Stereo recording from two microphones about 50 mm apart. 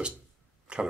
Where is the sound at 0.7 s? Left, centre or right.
Right.